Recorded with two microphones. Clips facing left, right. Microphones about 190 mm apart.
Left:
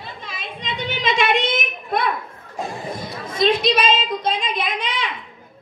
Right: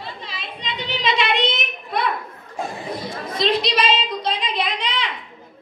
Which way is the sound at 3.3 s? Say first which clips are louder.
Left 3 dB; 50° left (ahead or behind).